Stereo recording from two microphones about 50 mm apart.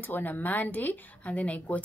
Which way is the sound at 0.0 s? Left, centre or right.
Left.